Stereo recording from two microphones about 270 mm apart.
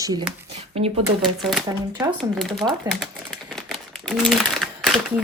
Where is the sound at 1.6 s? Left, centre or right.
Centre.